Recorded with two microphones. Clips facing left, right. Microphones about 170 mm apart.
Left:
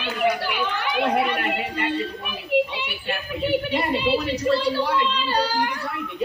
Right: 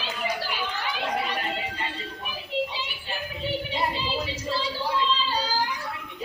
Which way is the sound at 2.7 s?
65° left (ahead or behind).